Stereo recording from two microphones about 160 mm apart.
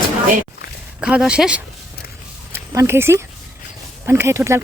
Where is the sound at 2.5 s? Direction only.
15° right (ahead or behind).